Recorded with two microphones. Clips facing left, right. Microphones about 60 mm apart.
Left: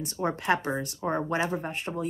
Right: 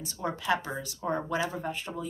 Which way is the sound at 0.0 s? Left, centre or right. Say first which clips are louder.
Left 4 dB; left.